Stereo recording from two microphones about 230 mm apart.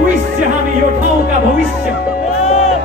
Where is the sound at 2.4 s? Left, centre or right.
Left.